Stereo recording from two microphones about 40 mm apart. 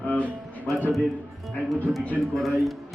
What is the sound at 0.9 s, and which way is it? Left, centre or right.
Speech, centre.